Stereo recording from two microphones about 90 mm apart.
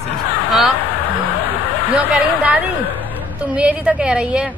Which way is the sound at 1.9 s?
15° right (ahead or behind).